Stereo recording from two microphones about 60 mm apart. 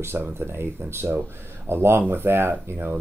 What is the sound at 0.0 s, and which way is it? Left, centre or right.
Speech, right.